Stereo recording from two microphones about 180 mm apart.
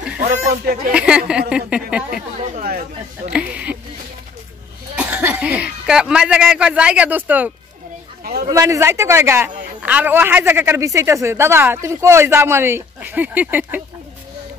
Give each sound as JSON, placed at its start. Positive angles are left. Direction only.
{"t": 0.9, "sound": "speech", "side_deg": -5}
{"t": 2.5, "sound": "chatter", "side_deg": -55}
{"t": 3.3, "sound": "a sound", "side_deg": -5}
{"t": 4.9, "sound": "speech", "side_deg": -5}
{"t": 8.2, "sound": "a sound", "side_deg": -60}
{"t": 8.5, "sound": "a woman's voice", "side_deg": -15}